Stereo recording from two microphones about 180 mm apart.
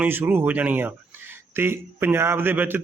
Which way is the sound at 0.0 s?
10° right (ahead or behind).